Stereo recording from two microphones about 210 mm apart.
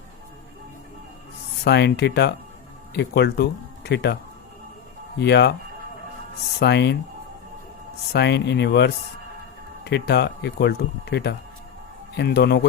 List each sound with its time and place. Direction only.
1.6 s speech: 50° left (ahead or behind)
5.2 s speech: 55° left (ahead or behind)
6.6 s speech: 55° left (ahead or behind)
8.1 s speech: 55° left (ahead or behind)